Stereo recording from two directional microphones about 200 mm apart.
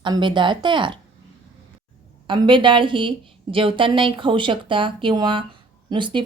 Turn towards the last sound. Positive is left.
turn(degrees=-25)  # may be behind; listen again after turning